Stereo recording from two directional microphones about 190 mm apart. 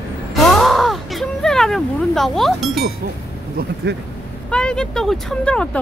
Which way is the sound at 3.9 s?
60° right (ahead or behind).